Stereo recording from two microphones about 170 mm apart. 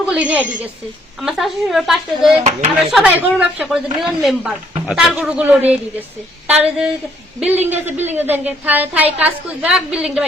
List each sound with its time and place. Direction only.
0.1 s a woman's voice: 10° right (ahead or behind)
2.4 s speech: 40° right (ahead or behind)
2.7 s a woman's voice: 5° right (ahead or behind)